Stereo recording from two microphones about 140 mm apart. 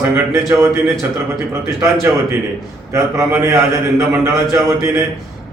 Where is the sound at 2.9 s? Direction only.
20° right (ahead or behind).